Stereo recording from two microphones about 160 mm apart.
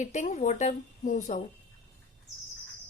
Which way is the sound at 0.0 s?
45° left (ahead or behind).